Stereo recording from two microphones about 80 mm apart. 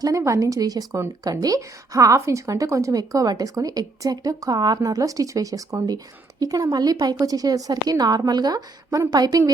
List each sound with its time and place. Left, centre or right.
0.0 s a woman's voice: right